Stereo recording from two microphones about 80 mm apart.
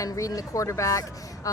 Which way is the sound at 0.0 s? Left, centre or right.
Left.